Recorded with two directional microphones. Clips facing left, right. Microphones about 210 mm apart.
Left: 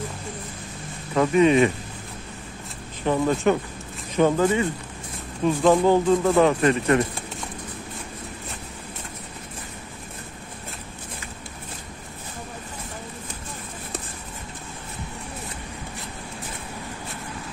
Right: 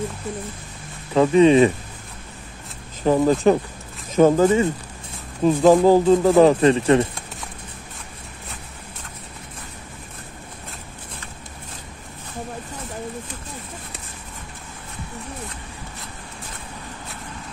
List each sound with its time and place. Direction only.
1.1 s speech: 30° right (ahead or behind)
3.1 s speech: 35° right (ahead or behind)